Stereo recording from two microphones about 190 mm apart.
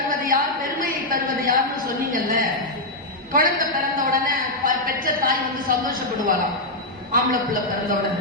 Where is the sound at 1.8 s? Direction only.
45° right (ahead or behind).